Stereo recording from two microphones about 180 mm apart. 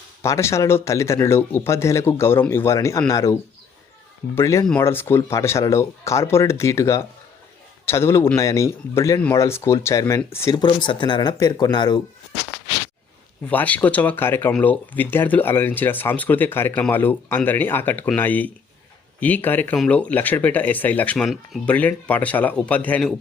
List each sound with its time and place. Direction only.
0.2 s speech: 15° left (ahead or behind)
4.4 s speech: 15° left (ahead or behind)
13.5 s speech: 10° left (ahead or behind)